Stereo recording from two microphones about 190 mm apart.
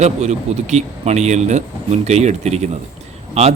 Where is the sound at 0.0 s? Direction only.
35° right (ahead or behind).